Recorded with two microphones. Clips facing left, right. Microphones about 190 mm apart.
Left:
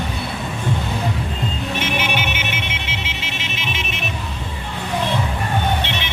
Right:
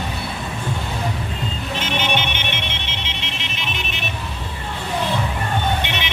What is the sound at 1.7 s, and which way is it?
Music, 10° left (ahead or behind).